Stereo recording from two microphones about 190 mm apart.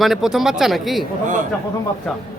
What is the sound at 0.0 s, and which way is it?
Speech, centre (ahead or behind).